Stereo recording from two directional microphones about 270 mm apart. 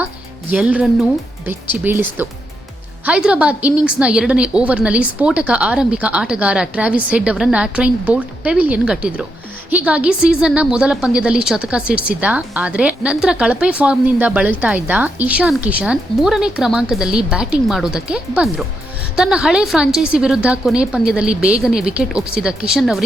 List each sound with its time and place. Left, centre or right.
0.5 s a woman's voice: centre